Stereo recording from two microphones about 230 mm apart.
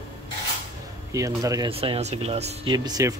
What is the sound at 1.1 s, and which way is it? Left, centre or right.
Speech, centre.